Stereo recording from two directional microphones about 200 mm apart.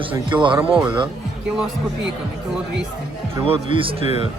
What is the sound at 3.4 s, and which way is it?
Speech, 25° right (ahead or behind).